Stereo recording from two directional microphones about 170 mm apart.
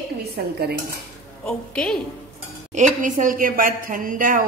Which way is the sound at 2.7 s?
50° right (ahead or behind).